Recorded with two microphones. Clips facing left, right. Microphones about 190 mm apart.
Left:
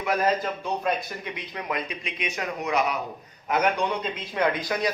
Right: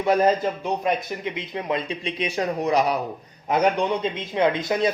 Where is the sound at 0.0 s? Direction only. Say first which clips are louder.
Right 5 dB; 30° right (ahead or behind).